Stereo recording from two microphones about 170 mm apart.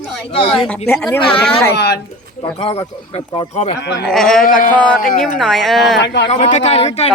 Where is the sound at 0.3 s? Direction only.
35° left (ahead or behind).